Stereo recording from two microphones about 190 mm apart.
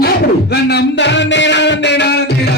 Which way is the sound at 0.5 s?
60° left (ahead or behind).